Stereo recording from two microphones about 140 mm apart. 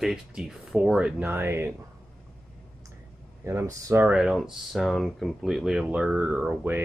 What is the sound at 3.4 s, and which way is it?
Speech, 20° right (ahead or behind).